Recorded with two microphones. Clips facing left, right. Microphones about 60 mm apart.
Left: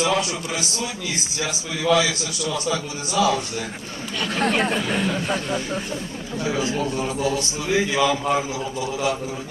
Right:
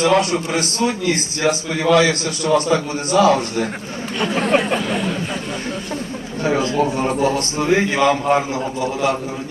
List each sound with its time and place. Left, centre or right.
0.0 s a man's voice: right
4.2 s speech: right
6.4 s a man's voice: right